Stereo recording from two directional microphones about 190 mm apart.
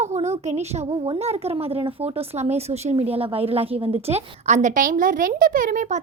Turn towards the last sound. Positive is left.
turn(degrees=-45)  # may be behind; listen again after turning